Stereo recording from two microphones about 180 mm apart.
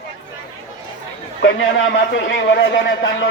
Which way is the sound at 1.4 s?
85° left.